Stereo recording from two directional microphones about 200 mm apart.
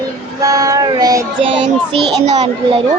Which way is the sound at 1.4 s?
25° right (ahead or behind).